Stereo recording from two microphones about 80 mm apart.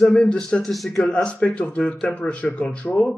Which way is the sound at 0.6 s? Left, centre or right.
Centre.